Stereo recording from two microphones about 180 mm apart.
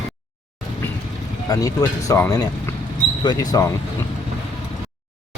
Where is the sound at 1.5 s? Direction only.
20° left (ahead or behind).